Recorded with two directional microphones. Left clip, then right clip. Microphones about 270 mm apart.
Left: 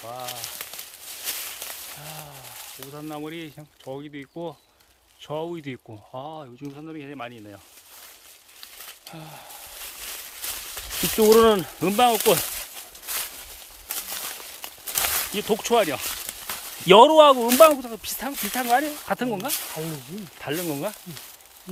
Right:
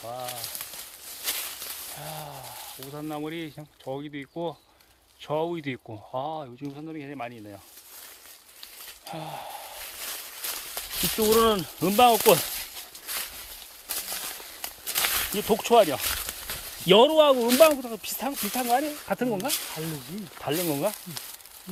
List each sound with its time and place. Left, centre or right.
0.0 s speech: centre
1.3 s walk: centre
2.0 s a sound: centre
2.6 s sizzle: centre
2.9 s speech: centre
9.0 s a sound: centre
11.3 s speech: centre
14.9 s a sound: centre
15.4 s speech: centre
16.8 s speech: centre